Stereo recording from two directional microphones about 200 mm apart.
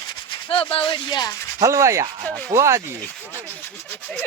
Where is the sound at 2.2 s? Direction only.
5° left (ahead or behind).